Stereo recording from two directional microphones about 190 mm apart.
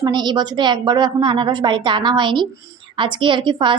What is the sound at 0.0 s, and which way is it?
A woman's voice, 20° right (ahead or behind).